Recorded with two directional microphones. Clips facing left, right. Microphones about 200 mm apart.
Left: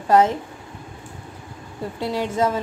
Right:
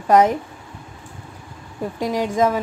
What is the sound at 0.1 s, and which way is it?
Speech, 15° right (ahead or behind).